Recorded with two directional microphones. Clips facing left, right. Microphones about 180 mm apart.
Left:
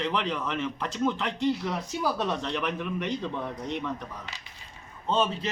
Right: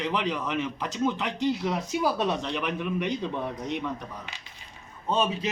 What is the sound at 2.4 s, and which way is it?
Speech, 5° right (ahead or behind).